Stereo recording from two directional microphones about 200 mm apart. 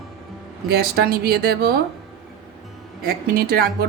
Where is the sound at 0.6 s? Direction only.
50° right (ahead or behind).